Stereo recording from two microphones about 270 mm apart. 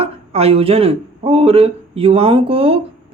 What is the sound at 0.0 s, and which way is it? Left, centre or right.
Speech, right.